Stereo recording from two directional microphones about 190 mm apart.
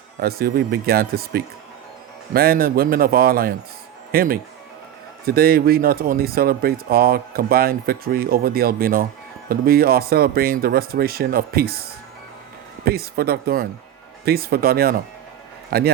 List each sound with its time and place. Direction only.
0.2 s speech: 55° right (ahead or behind)